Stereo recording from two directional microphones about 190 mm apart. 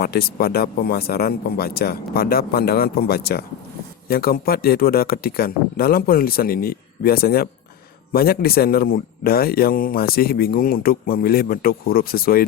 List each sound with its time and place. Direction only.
0.0 s speech: 55° left (ahead or behind)